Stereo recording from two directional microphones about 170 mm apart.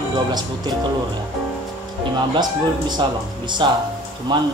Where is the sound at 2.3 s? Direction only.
25° right (ahead or behind).